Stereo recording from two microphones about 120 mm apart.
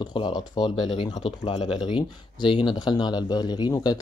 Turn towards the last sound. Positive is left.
turn(degrees=35)  # may be behind; listen again after turning